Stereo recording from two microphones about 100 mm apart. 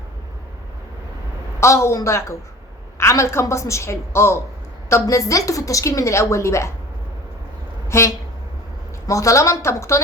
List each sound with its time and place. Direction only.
1.5 s a woman's voice: 30° left (ahead or behind)
7.9 s a woman's voice: 25° left (ahead or behind)